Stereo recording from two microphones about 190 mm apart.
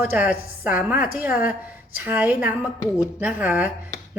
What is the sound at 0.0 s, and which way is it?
Speech, 10° right (ahead or behind).